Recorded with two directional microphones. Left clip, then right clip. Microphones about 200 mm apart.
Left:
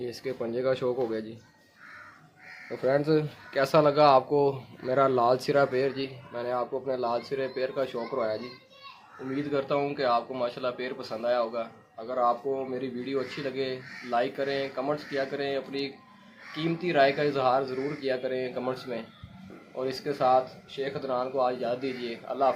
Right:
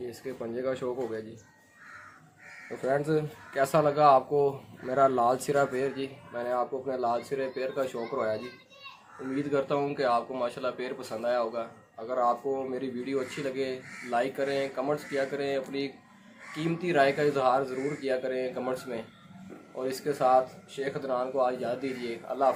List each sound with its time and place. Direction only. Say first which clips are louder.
0.0 s speech: left 4 dB; 50° left (ahead or behind)
2.8 s a man's voice: left 3 dB; 30° left (ahead or behind); by 22.5 s 10° left (ahead or behind)